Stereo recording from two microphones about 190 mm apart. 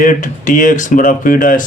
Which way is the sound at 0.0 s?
40° left (ahead or behind).